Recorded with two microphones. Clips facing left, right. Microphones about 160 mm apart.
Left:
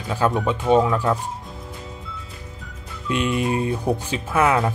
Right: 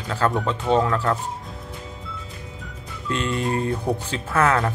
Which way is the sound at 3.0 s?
15° left (ahead or behind).